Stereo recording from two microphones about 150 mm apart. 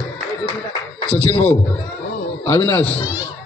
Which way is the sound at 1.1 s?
10° left (ahead or behind).